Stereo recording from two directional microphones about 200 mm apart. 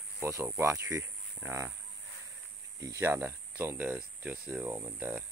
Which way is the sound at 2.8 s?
15° right (ahead or behind).